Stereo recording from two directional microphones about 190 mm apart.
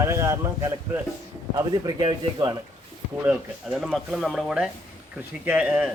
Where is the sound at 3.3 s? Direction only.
Centre (ahead or behind).